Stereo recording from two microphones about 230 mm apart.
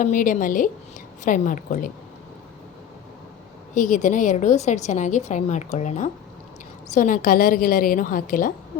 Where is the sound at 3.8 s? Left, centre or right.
Left.